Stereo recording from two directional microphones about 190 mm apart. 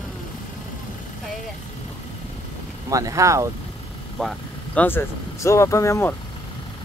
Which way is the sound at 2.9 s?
15° right (ahead or behind).